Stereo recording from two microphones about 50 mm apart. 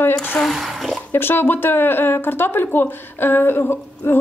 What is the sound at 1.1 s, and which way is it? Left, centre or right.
Speech, left.